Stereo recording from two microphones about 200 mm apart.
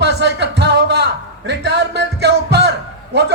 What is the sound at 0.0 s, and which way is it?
Music, 60° right (ahead or behind).